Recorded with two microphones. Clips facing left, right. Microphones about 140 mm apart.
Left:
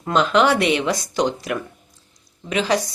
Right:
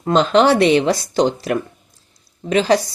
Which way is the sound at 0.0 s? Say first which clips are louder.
Right 4 dB; 30° right (ahead or behind).